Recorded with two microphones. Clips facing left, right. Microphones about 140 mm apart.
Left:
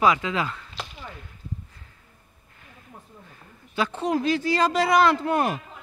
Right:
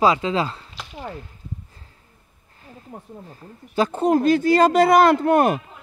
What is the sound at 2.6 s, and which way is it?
Speech, 35° right (ahead or behind).